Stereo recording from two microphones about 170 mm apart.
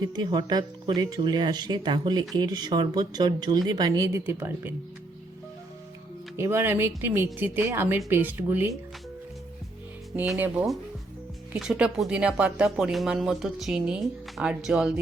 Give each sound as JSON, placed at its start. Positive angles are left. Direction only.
{"t": 0.1, "sound": "speech", "side_deg": -25}
{"t": 6.3, "sound": "speech", "side_deg": -15}
{"t": 10.2, "sound": "speech", "side_deg": -10}